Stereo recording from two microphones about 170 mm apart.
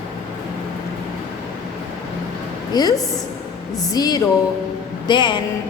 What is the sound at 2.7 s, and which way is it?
A woman's voice, 20° left (ahead or behind).